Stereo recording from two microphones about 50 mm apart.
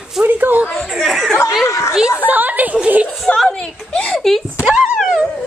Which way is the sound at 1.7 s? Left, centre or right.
Left.